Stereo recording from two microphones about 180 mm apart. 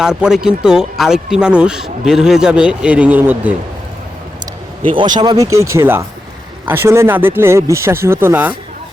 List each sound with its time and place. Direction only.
0.0 s speech: 5° right (ahead or behind)
4.9 s speech: 25° right (ahead or behind); by 8.5 s 10° right (ahead or behind)